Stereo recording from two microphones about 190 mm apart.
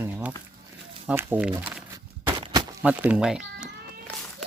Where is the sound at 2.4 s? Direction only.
20° right (ahead or behind).